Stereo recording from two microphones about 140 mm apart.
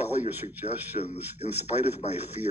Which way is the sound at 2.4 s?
55° left (ahead or behind).